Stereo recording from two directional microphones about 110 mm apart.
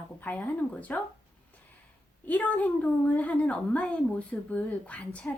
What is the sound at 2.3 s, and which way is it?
A woman's voice, 15° left (ahead or behind).